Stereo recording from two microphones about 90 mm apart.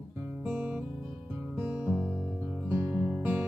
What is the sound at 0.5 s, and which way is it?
Music, 20° right (ahead or behind).